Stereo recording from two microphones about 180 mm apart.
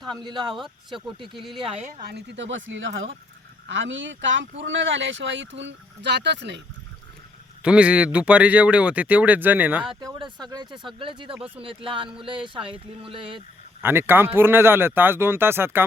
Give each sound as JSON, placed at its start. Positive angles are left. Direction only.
{"t": 0.2, "sound": "speech", "side_deg": -25}
{"t": 1.9, "sound": "speech", "side_deg": -55}
{"t": 7.6, "sound": "a man's voice", "side_deg": -5}
{"t": 9.9, "sound": "speech", "side_deg": -25}
{"t": 11.3, "sound": "a man's voice", "side_deg": -5}
{"t": 11.6, "sound": "speech", "side_deg": -30}
{"t": 13.8, "sound": "a man's voice", "side_deg": -10}